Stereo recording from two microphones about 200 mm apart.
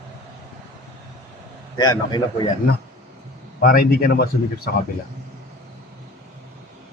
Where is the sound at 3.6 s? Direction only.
45° left (ahead or behind).